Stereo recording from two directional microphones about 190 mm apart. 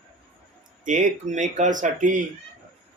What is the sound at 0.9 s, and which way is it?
Speech, 40° right (ahead or behind).